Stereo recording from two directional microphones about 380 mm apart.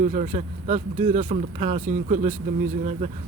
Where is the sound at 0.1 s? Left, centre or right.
Centre.